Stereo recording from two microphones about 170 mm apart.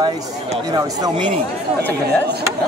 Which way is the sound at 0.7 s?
25° right (ahead or behind).